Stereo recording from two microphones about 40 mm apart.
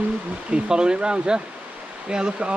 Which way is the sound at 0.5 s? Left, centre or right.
Right.